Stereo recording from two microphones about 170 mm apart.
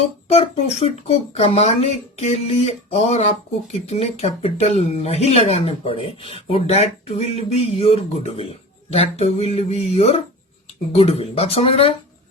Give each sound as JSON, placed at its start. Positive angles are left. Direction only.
{"t": 0.3, "sound": "speech", "side_deg": 40}